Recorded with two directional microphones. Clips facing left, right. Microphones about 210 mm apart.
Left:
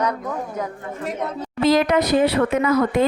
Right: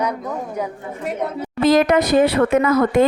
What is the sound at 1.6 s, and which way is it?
Speech, 45° right (ahead or behind).